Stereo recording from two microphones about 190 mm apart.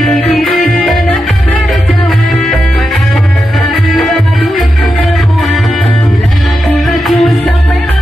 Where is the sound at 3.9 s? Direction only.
Centre (ahead or behind).